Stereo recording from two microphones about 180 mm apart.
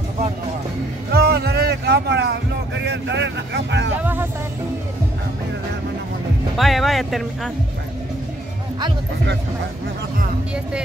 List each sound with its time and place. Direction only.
1.1 s a sound: 60° right (ahead or behind)
4.0 s vehicle: 10° right (ahead or behind)
6.5 s speech: centre (ahead or behind)